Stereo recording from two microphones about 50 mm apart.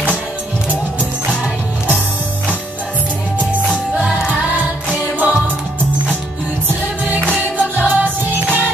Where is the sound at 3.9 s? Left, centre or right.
Centre.